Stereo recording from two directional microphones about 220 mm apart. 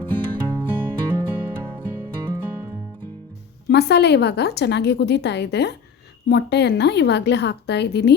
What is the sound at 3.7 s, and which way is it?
A woman's voice, 50° left (ahead or behind).